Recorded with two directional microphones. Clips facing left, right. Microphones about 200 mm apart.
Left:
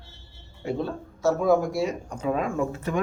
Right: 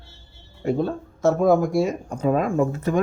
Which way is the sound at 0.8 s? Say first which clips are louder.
Right 3 dB; 50° right (ahead or behind).